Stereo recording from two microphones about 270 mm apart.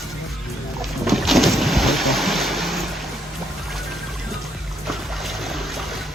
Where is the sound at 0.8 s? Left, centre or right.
Centre.